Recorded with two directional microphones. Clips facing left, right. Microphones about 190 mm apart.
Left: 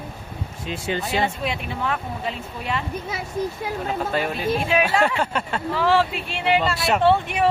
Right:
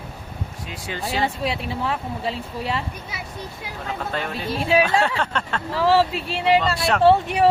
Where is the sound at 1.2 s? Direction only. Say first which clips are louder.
Right 1 dB; 35° right (ahead or behind).